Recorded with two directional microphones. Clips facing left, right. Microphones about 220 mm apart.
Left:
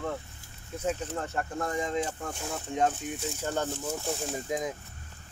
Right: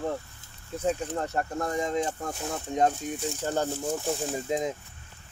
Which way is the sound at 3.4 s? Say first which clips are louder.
Right 3 dB; 35° right (ahead or behind).